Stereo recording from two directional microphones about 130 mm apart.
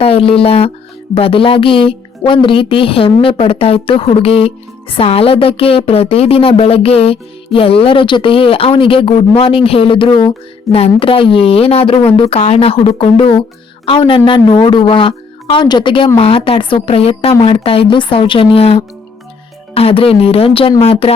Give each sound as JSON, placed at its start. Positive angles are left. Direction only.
{"t": 0.0, "sound": "a woman's voice", "side_deg": 45}